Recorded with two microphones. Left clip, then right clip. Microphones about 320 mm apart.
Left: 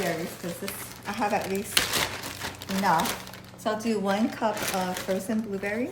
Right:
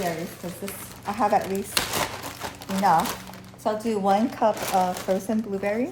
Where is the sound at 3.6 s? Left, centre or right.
Centre.